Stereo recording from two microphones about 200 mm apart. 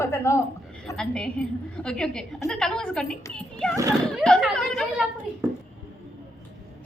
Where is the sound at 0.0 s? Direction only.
15° left (ahead or behind).